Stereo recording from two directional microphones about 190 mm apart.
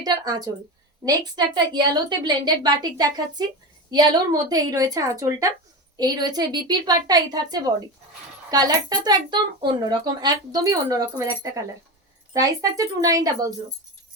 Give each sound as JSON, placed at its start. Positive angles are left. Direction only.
{"t": 0.0, "sound": "speech", "side_deg": -20}
{"t": 12.3, "sound": "speech", "side_deg": -20}